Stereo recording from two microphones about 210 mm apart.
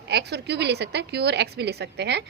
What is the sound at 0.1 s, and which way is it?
A woman's voice, 50° right (ahead or behind).